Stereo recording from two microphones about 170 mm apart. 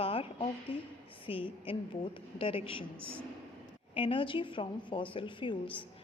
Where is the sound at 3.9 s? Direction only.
30° left (ahead or behind).